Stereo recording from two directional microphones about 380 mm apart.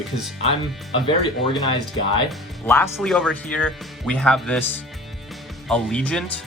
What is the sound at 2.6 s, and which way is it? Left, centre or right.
Speech, centre.